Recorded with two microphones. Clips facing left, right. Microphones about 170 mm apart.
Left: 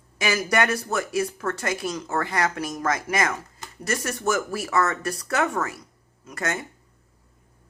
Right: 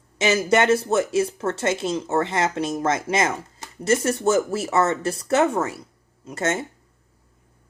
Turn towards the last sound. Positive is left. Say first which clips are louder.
# right 5 dB
turn(degrees=-25)  # may be behind; listen again after turning